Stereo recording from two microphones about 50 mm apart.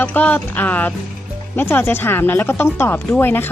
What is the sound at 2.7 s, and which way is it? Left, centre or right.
Speech, left.